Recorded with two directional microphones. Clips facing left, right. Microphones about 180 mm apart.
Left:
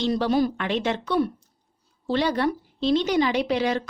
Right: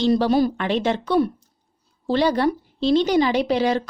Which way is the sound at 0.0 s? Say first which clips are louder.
Right 4 dB; 35° right (ahead or behind).